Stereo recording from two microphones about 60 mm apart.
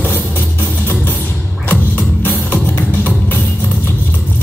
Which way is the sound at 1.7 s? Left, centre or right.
Left.